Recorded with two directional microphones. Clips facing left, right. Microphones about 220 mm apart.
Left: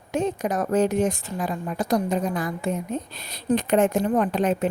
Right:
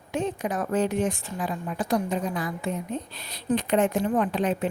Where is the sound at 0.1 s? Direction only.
45° left (ahead or behind).